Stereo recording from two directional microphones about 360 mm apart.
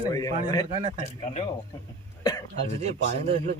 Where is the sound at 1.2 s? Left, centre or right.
Centre.